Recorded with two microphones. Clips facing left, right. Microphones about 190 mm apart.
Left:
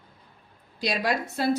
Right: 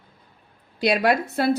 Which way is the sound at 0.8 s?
65° right (ahead or behind).